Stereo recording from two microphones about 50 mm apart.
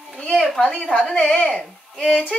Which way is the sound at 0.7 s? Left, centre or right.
Centre.